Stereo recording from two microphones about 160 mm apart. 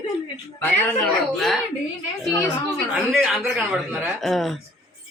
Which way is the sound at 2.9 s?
5° right (ahead or behind).